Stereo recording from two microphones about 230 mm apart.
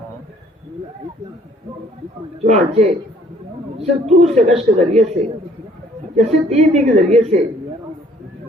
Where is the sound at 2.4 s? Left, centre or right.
Right.